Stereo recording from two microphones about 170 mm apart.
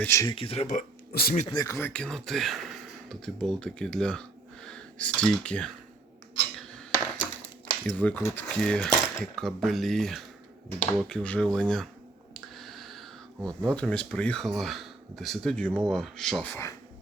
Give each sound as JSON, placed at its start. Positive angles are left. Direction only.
{"t": 0.0, "sound": "speech", "side_deg": 15}
{"t": 0.3, "sound": "speech", "side_deg": 35}
{"t": 1.1, "sound": "speech", "side_deg": 65}
{"t": 1.5, "sound": "speech", "side_deg": 20}
{"t": 1.9, "sound": "speech", "side_deg": 5}
{"t": 6.6, "sound": "a sound", "side_deg": 5}
{"t": 7.9, "sound": "speech", "side_deg": 10}
{"t": 12.3, "sound": "a sound", "side_deg": 0}
{"t": 13.7, "sound": "speech", "side_deg": 5}